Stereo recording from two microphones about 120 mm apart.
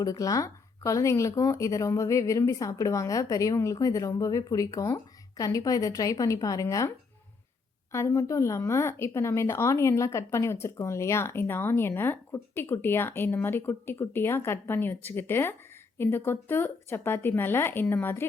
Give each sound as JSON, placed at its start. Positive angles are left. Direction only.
{"t": 0.0, "sound": "speech", "side_deg": 30}
{"t": 7.9, "sound": "speech", "side_deg": 25}